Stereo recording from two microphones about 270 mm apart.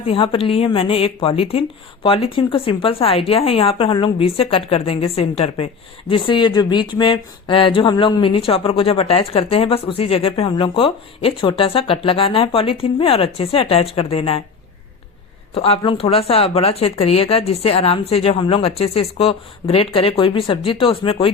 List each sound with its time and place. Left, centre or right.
0.0 s speech: centre
15.5 s speech: left